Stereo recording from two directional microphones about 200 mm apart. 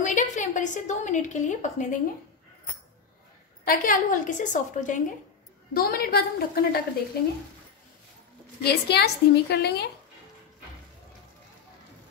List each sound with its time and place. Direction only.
0.0 s a woman's voice: 40° left (ahead or behind)
3.6 s a woman's voice: 45° left (ahead or behind)
5.7 s a woman's voice: 50° left (ahead or behind)
8.6 s a woman's voice: 55° left (ahead or behind)